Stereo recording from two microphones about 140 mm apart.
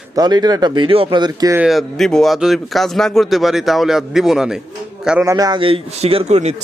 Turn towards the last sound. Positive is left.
turn(degrees=-50)  # may be behind; listen again after turning